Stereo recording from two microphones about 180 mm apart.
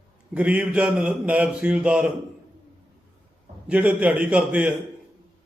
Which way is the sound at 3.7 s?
10° right (ahead or behind).